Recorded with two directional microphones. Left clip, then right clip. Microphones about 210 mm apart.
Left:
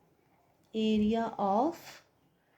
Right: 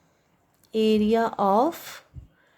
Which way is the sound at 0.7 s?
30° right (ahead or behind).